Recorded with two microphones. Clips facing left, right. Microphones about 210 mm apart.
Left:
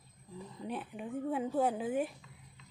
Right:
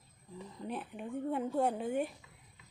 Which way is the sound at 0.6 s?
Centre (ahead or behind).